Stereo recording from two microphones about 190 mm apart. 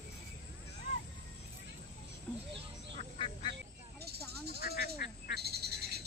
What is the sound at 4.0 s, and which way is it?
Snake, 55° right (ahead or behind).